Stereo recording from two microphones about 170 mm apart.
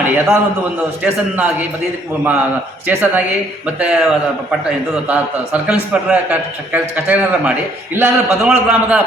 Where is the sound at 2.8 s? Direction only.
10° right (ahead or behind).